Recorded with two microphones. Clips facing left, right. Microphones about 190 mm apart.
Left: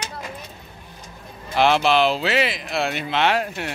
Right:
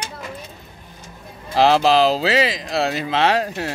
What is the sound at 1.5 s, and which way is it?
Speech, 35° right (ahead or behind).